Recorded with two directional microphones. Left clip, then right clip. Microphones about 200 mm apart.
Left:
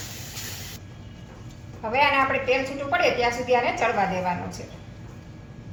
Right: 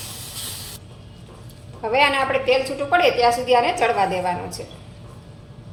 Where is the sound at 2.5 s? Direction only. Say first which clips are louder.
Right 5 dB; 55° right (ahead or behind).